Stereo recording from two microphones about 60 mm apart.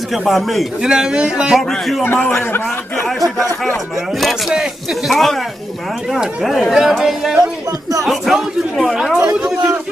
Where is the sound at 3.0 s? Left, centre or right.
Centre.